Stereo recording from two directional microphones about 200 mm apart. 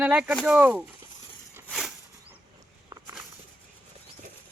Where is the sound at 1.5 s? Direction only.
5° right (ahead or behind).